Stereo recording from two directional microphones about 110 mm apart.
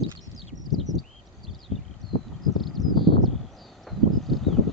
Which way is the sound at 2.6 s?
Centre (ahead or behind).